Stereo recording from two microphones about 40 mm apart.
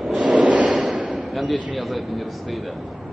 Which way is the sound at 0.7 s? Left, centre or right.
Right.